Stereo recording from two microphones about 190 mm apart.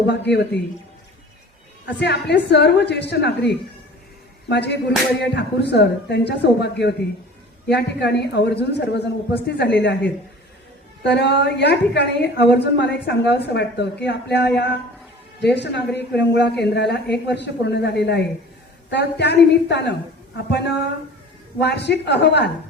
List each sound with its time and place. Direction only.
0.1 s a woman's voice: 65° left (ahead or behind)
2.0 s a woman's voice: 60° left (ahead or behind)